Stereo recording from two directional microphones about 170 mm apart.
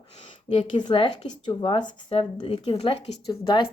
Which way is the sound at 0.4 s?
25° left (ahead or behind).